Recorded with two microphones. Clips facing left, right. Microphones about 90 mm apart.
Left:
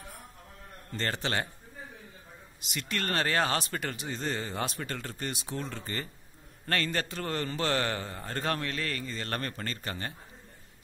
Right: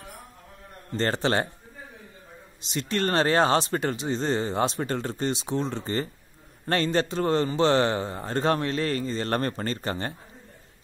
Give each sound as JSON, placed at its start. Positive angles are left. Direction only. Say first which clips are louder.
{"t": 0.9, "sound": "speech", "louder": "right 7 dB", "side_deg": -35}
{"t": 2.6, "sound": "a man's voice", "louder": "right 8 dB", "side_deg": -30}